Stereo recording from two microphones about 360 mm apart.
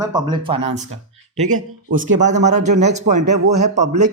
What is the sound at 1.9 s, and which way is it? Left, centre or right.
Speech, right.